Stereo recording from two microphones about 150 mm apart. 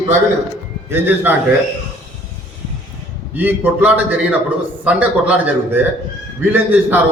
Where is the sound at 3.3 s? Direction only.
10° right (ahead or behind).